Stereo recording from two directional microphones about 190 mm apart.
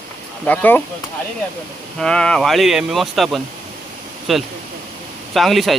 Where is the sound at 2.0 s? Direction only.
5° left (ahead or behind).